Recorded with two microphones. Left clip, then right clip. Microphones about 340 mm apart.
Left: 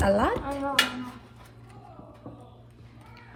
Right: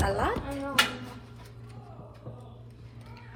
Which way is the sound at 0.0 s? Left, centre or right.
Left.